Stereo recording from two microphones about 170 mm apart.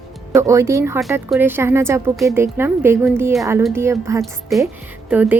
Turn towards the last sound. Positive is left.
turn(degrees=-10)  # may be behind; listen again after turning